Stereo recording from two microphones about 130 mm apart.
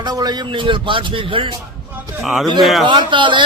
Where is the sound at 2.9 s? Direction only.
35° right (ahead or behind).